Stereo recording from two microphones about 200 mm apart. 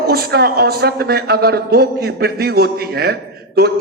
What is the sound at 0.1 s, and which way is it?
A man's voice, 50° right (ahead or behind).